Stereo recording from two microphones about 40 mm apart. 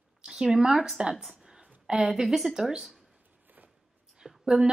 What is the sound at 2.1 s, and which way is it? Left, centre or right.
Speech, centre.